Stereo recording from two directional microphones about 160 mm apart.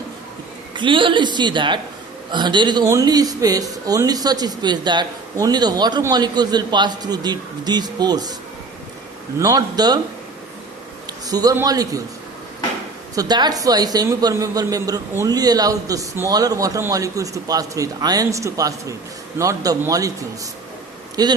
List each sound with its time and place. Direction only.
0.7 s speech: 30° right (ahead or behind)
9.4 s speech: 25° right (ahead or behind)
11.3 s speech: 25° right (ahead or behind)
13.1 s speech: 25° right (ahead or behind)